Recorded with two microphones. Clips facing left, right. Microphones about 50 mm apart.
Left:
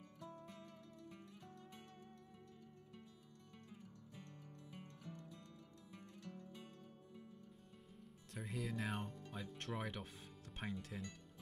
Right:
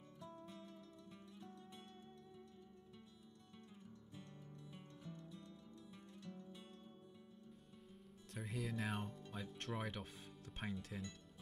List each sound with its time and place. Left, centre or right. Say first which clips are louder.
8.3 s speech: even; centre